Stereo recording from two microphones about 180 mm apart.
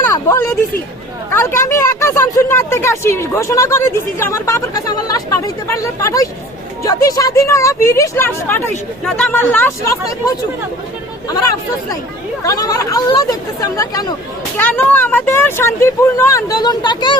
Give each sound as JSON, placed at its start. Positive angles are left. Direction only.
{"t": 0.0, "sound": "a sound", "side_deg": 15}
{"t": 1.3, "sound": "speech", "side_deg": 15}
{"t": 12.4, "sound": "speech", "side_deg": 20}
{"t": 14.6, "sound": "speech", "side_deg": 10}